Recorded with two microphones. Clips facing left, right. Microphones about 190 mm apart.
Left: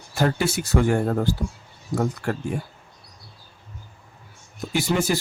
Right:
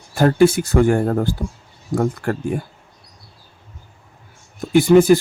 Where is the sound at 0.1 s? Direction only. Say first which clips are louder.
Right 9 dB; 50° right (ahead or behind).